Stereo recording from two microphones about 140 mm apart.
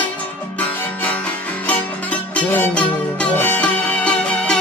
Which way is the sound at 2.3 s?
15° left (ahead or behind).